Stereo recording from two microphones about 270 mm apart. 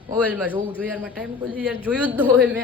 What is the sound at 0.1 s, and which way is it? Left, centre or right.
A man's voice, centre.